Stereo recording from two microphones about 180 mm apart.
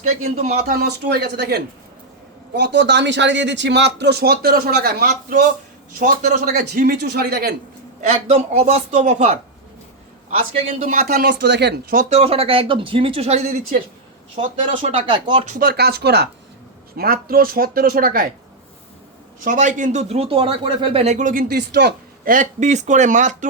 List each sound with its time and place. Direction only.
0.0 s speech: 35° right (ahead or behind)
0.8 s speech: 65° right (ahead or behind)
8.1 s speech: 35° right (ahead or behind)
10.8 s speech: 45° right (ahead or behind)
11.2 s speech: 65° right (ahead or behind); by 15.0 s 40° right (ahead or behind)
15.1 s speech: 25° right (ahead or behind)
15.4 s speech: 55° right (ahead or behind)
19.5 s speech: 45° right (ahead or behind)